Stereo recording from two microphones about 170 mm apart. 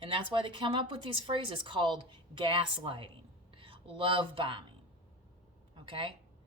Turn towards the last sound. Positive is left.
turn(degrees=-30)  # may be behind; listen again after turning